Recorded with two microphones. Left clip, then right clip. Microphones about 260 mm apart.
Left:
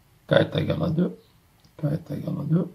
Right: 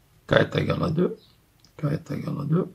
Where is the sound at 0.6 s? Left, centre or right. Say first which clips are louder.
Right 1 dB; right.